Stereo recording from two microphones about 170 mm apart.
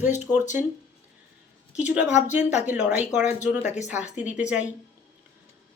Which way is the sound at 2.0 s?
45° left (ahead or behind).